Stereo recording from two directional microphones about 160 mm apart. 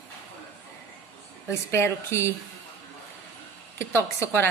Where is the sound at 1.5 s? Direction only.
15° left (ahead or behind).